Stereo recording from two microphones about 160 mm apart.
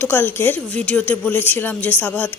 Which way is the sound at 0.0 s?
10° left (ahead or behind).